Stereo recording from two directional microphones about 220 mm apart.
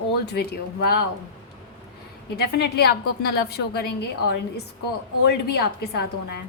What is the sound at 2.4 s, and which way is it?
A woman's voice, 50° left (ahead or behind).